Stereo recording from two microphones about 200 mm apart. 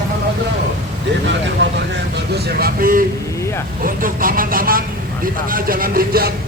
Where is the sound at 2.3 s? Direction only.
50° right (ahead or behind).